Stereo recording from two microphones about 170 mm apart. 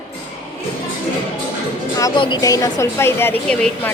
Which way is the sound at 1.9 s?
25° left (ahead or behind).